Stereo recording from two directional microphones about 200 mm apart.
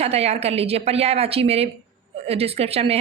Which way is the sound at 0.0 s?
30° right (ahead or behind).